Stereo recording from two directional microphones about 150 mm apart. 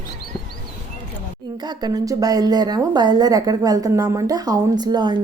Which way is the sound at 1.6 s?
25° right (ahead or behind).